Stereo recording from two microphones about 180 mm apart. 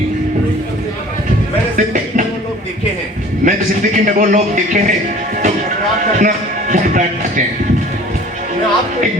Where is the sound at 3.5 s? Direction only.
50° right (ahead or behind).